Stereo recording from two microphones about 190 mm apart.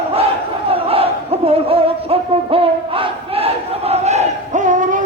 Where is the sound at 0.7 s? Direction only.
30° right (ahead or behind).